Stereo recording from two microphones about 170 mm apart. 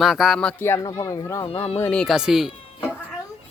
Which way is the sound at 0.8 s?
20° left (ahead or behind).